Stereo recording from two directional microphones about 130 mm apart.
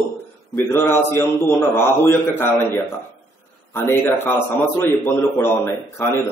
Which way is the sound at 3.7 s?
15° left (ahead or behind).